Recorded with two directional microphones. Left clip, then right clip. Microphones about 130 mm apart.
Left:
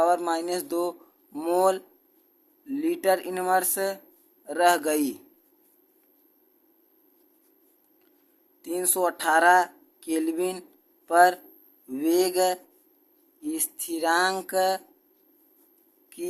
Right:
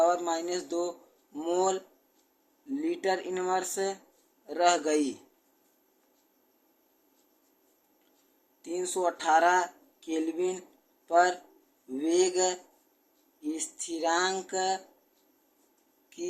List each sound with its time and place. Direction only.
0.0 s speech: 90° left
4.4 s speech: 70° left (ahead or behind)
8.6 s speech: 90° left
11.9 s speech: 70° left (ahead or behind)